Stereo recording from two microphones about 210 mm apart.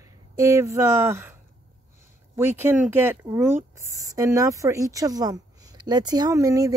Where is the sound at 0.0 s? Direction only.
15° right (ahead or behind).